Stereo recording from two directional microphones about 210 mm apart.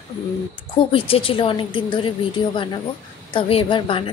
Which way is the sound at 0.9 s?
25° left (ahead or behind).